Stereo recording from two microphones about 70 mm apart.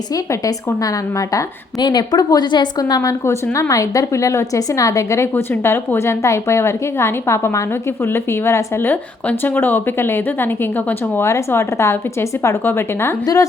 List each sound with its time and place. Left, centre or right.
0.1 s speech: left
1.8 s a woman's voice: left
5.3 s a woman's voice: left
11.3 s a woman's voice: left